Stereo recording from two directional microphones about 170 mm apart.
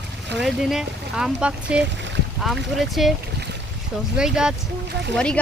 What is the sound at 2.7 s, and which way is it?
Speech, centre (ahead or behind).